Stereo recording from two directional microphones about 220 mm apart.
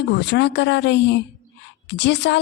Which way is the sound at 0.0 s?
50° left (ahead or behind).